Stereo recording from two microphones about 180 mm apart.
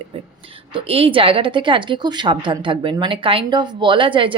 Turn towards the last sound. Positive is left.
turn(degrees=-30)  # may be behind; listen again after turning